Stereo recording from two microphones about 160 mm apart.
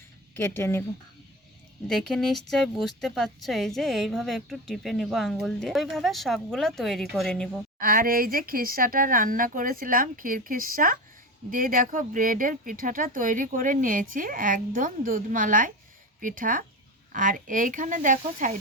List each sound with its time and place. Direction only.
0.3 s speech: 15° left (ahead or behind)
1.9 s a woman's voice: centre (ahead or behind)
7.8 s speech: 65° right (ahead or behind)